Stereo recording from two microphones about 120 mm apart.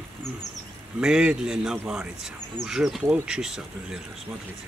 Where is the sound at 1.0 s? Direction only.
5° right (ahead or behind).